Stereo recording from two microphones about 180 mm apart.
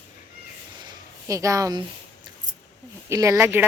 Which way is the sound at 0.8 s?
15° right (ahead or behind).